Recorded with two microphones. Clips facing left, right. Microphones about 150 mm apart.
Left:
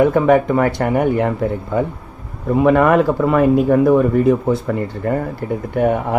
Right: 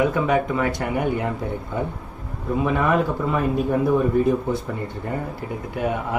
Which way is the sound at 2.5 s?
70° left (ahead or behind).